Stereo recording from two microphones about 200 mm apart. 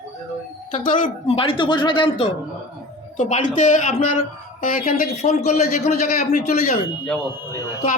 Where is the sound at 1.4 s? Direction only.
25° left (ahead or behind).